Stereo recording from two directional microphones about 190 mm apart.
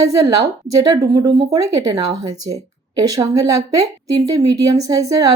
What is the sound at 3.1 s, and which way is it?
A woman's voice, 20° right (ahead or behind).